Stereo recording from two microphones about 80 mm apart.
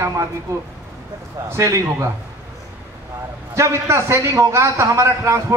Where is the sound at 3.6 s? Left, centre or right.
Right.